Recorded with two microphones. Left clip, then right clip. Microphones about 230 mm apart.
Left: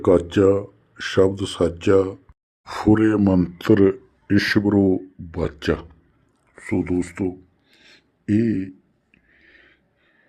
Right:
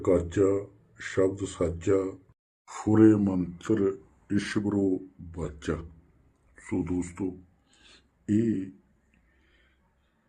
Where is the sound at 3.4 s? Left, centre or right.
Left.